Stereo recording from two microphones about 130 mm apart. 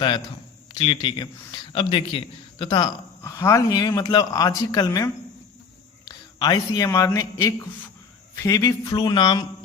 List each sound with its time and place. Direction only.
0.7 s a man's voice: 40° left (ahead or behind)
3.2 s speech: 20° left (ahead or behind)
8.4 s speech: 25° left (ahead or behind)